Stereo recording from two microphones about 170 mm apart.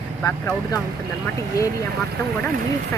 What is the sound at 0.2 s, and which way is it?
Speech, 10° left (ahead or behind).